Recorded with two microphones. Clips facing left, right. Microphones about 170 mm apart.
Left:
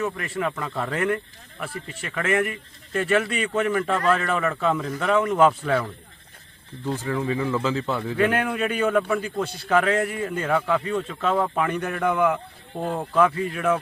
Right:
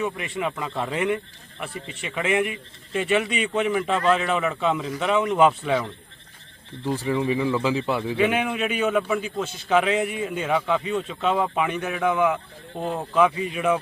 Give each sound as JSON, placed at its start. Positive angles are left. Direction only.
{"t": 0.3, "sound": "speech", "side_deg": -10}